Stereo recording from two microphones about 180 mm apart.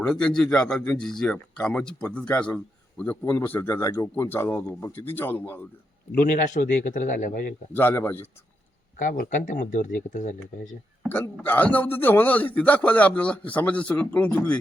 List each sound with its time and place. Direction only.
0.0 s a man's voice: 5° left (ahead or behind)
6.1 s a man's voice: 45° left (ahead or behind)
7.7 s a man's voice: 10° left (ahead or behind)
9.0 s a man's voice: 45° left (ahead or behind)
11.1 s a man's voice: 10° left (ahead or behind)